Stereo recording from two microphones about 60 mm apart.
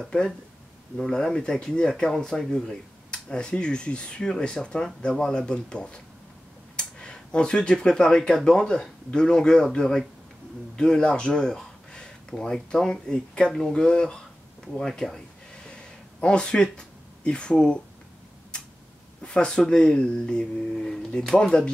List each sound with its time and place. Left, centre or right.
0.9 s speech: centre
15.5 s a sound: centre
19.2 s speech: centre